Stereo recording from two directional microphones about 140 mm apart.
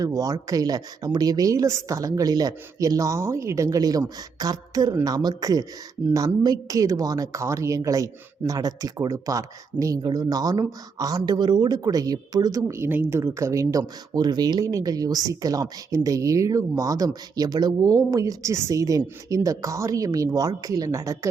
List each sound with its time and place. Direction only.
0.0 s a woman's voice: 25° right (ahead or behind)